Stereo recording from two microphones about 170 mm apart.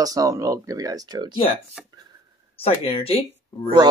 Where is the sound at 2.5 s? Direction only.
35° left (ahead or behind).